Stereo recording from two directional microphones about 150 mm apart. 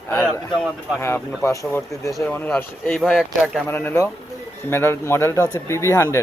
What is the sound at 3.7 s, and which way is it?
Speech, 15° left (ahead or behind).